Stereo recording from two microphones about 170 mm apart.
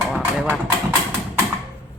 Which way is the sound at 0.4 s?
10° right (ahead or behind).